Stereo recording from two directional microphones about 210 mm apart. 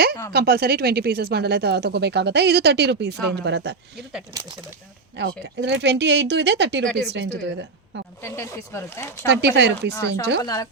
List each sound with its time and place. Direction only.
0.3 s speech: 50° right (ahead or behind)
5.2 s speech: 55° right (ahead or behind)
8.2 s speech: 15° left (ahead or behind)
9.2 s speech: 50° right (ahead or behind)
10.4 s speech: 15° left (ahead or behind)